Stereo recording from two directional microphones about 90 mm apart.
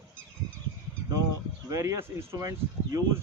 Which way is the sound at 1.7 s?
30° right (ahead or behind).